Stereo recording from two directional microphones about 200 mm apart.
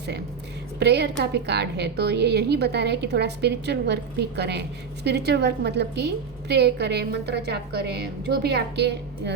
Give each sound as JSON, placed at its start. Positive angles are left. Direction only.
{"t": 0.8, "sound": "a woman's voice", "side_deg": -55}